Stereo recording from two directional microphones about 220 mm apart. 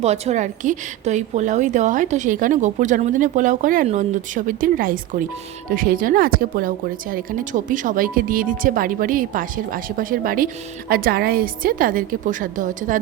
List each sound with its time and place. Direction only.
0.0 s a woman's voice: 30° right (ahead or behind)